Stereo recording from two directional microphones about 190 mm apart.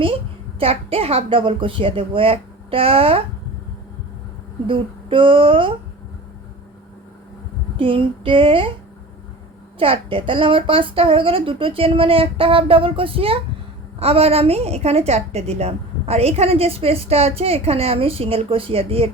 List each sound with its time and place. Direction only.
0.6 s a woman's voice: 30° right (ahead or behind)
4.6 s a woman's voice: 25° right (ahead or behind)
7.8 s a woman's voice: 25° right (ahead or behind)
9.7 s a woman's voice: 30° right (ahead or behind)